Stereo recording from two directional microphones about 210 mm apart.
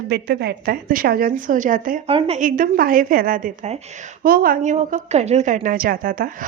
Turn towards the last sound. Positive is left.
turn(degrees=-40)  # may be behind; listen again after turning